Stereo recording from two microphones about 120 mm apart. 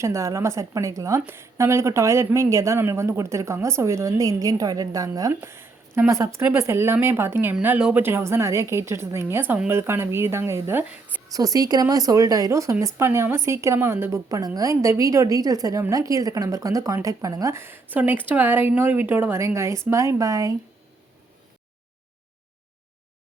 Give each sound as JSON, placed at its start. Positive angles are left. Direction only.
{"t": 0.0, "sound": "a woman's voice", "side_deg": -25}
{"t": 5.3, "sound": "a woman's voice", "side_deg": -20}
{"t": 11.3, "sound": "a woman's voice", "side_deg": -30}